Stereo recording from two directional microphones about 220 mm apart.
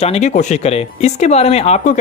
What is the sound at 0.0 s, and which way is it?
Speech, 30° left (ahead or behind).